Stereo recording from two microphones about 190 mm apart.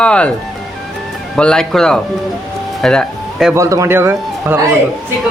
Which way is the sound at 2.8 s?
5° left (ahead or behind).